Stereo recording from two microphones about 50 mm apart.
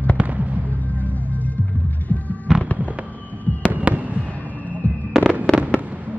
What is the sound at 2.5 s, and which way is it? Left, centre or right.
Fireworks, centre.